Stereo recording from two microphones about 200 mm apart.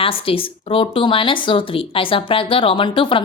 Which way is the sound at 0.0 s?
25° left (ahead or behind).